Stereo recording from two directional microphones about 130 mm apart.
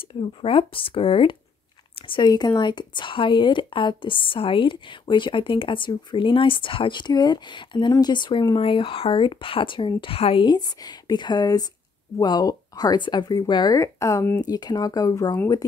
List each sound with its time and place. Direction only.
0.1 s speech: 45° left (ahead or behind)
10.5 s speech: 30° left (ahead or behind)